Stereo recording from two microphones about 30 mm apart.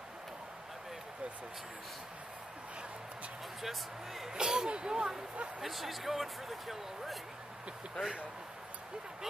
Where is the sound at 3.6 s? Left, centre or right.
Centre.